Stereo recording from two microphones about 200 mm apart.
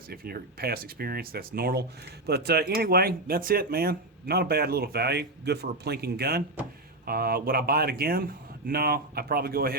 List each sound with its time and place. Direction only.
0.1 s speech: 50° right (ahead or behind)